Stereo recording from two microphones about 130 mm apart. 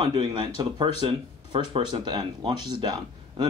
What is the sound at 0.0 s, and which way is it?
Speech, 35° right (ahead or behind).